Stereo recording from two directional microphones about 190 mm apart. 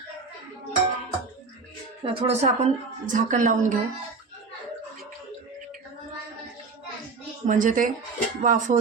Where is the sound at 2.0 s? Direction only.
30° right (ahead or behind).